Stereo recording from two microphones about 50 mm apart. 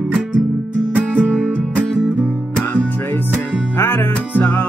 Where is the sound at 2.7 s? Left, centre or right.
Left.